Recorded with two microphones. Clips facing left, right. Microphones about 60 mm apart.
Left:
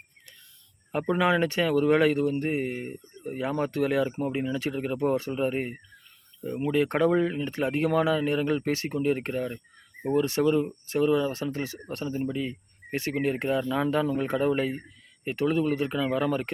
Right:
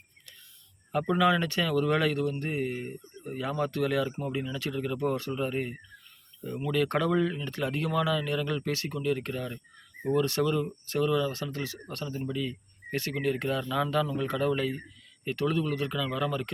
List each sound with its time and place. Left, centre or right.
0.9 s speech: left